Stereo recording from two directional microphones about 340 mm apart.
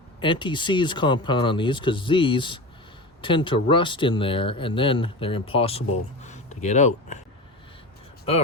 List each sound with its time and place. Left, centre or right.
0.2 s speech: centre